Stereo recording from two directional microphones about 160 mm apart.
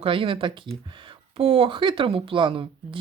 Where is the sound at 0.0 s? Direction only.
35° right (ahead or behind).